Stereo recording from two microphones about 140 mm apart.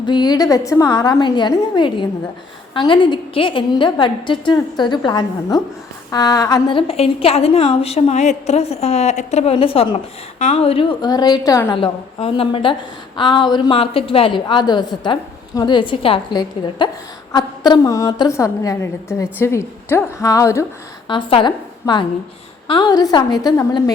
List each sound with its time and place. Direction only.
0.0 s a woman's voice: 30° left (ahead or behind)
11.7 s a woman's voice: 40° left (ahead or behind); by 20.7 s 20° left (ahead or behind)
21.1 s a woman's voice: 40° left (ahead or behind)